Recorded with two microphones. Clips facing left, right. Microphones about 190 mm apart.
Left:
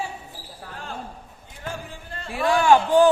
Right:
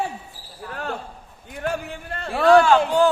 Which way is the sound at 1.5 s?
65° right (ahead or behind).